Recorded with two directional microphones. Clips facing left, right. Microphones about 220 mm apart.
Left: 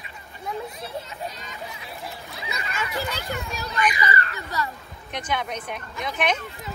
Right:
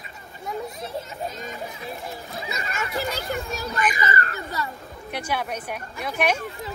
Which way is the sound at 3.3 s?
50° right (ahead or behind).